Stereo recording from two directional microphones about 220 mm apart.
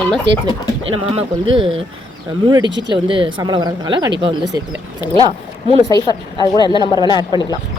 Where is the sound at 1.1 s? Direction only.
20° right (ahead or behind).